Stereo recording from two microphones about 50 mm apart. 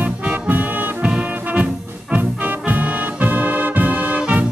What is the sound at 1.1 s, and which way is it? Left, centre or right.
Music, right.